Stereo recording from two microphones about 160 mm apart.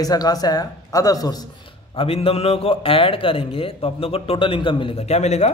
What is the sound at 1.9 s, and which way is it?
A man's voice, 35° left (ahead or behind).